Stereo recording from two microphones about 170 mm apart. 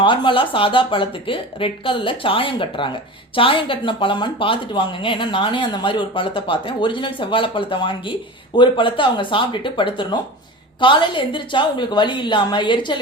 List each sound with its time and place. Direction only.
0.0 s speech: 30° left (ahead or behind)